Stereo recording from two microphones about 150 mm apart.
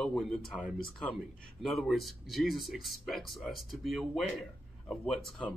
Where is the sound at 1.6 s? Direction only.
Centre (ahead or behind).